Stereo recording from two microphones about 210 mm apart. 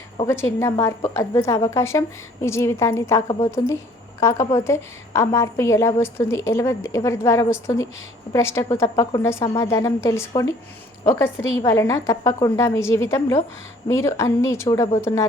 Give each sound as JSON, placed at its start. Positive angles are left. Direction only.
{"t": 0.3, "sound": "a woman's voice", "side_deg": 10}
{"t": 3.2, "sound": "a woman's voice", "side_deg": 30}
{"t": 4.2, "sound": "a woman's voice", "side_deg": 15}